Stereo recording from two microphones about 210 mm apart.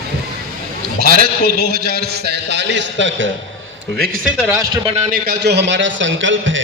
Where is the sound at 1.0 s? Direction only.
45° right (ahead or behind).